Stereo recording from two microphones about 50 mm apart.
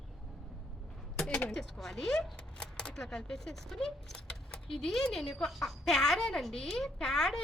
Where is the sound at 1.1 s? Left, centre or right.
Left.